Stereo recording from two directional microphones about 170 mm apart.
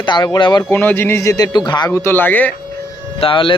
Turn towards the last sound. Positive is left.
turn(degrees=30)  # may be behind; listen again after turning